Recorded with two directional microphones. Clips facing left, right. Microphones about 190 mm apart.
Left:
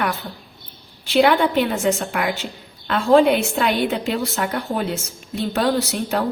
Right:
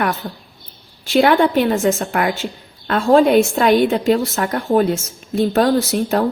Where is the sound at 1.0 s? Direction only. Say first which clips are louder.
Right 3 dB; 45° right (ahead or behind).